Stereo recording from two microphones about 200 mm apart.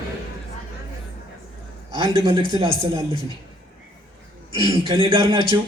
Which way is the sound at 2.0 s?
20° right (ahead or behind).